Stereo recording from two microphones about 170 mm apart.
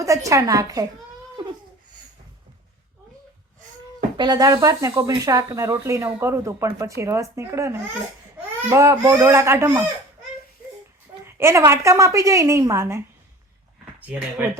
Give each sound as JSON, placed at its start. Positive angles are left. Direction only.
{"t": 0.0, "sound": "a woman's voice", "side_deg": -20}
{"t": 4.2, "sound": "speech", "side_deg": -20}
{"t": 11.3, "sound": "speech", "side_deg": -15}
{"t": 14.1, "sound": "speech", "side_deg": -10}